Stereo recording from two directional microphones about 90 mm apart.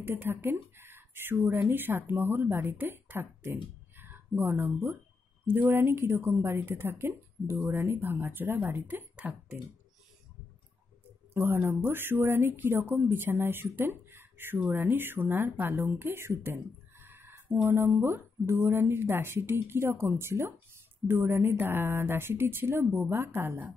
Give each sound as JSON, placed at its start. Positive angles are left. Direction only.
{"t": 0.0, "sound": "a woman's voice", "side_deg": -25}
{"t": 11.3, "sound": "a woman's voice", "side_deg": -25}